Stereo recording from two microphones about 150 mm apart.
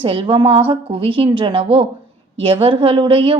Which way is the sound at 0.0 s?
35° right (ahead or behind).